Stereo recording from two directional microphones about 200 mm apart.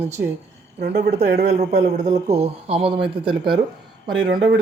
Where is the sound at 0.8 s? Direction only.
50° right (ahead or behind).